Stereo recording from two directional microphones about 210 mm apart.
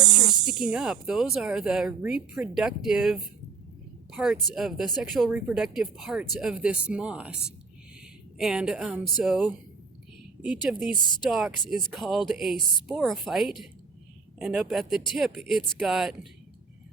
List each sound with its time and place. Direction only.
0.4 s speech: 5° right (ahead or behind)
8.4 s speech: centre (ahead or behind)